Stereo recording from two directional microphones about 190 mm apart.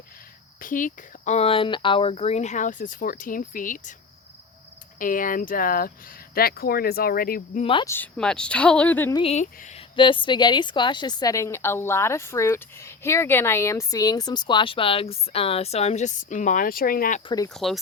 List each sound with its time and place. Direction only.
0.6 s speech: 45° left (ahead or behind)
4.9 s speech: 45° left (ahead or behind)
7.6 s a woman's voice: 25° left (ahead or behind)
7.9 s speech: 10° left (ahead or behind)
9.1 s speech: 35° left (ahead or behind)
9.9 s a woman's voice: 25° left (ahead or behind); by 17.2 s 45° left (ahead or behind)
17.2 s a woman's voice: 20° left (ahead or behind)
17.5 s speech: centre (ahead or behind)